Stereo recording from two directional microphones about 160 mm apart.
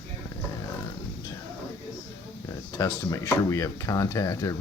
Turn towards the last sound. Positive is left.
turn(degrees=20)  # may be behind; listen again after turning